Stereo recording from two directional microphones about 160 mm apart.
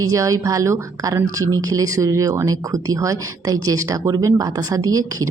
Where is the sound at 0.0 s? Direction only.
20° right (ahead or behind).